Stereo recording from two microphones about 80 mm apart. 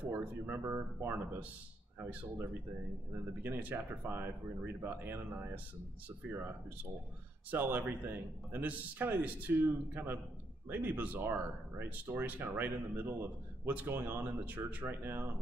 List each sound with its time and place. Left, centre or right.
0.0 s speech: right